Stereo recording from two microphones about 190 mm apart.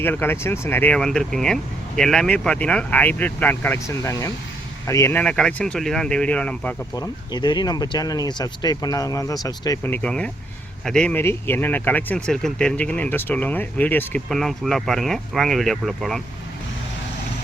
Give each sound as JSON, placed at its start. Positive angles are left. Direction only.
{"t": 0.0, "sound": "speech", "side_deg": 10}
{"t": 6.9, "sound": "speech", "side_deg": 20}